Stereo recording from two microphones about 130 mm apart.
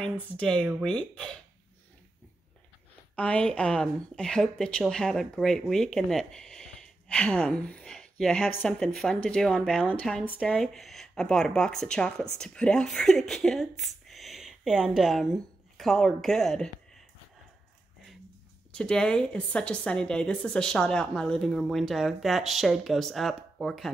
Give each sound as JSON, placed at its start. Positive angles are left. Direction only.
{"t": 0.0, "sound": "speech", "side_deg": 5}
{"t": 3.2, "sound": "a woman's voice", "side_deg": 10}
{"t": 18.7, "sound": "a woman's voice", "side_deg": 5}